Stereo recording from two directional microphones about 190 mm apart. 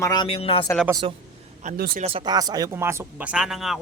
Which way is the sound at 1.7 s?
50° right (ahead or behind).